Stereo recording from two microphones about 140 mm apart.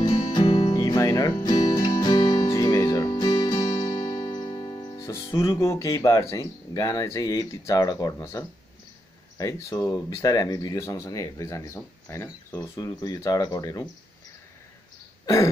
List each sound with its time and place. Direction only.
0.0 s music: 35° left (ahead or behind)
0.7 s music: 25° left (ahead or behind)
9.4 s speech: 25° left (ahead or behind)